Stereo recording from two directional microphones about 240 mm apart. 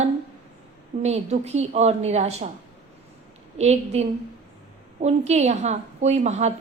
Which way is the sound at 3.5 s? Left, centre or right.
Right.